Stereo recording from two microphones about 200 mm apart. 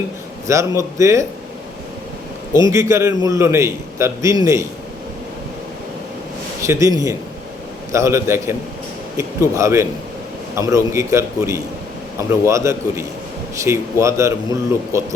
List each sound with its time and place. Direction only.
0.4 s a man's voice: 15° right (ahead or behind)
2.5 s a man's voice: 15° right (ahead or behind)
6.6 s a man's voice: 15° right (ahead or behind)